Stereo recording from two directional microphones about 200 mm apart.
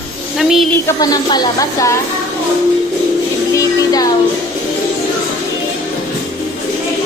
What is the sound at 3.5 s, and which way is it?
Music, 15° left (ahead or behind).